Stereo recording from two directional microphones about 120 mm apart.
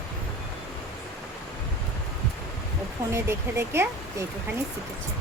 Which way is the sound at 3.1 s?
20° right (ahead or behind).